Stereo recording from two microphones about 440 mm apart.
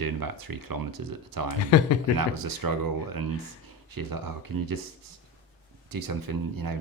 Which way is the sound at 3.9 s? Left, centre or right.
Right.